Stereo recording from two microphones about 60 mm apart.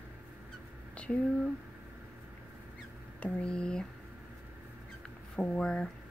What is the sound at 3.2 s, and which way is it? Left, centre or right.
Speech, centre.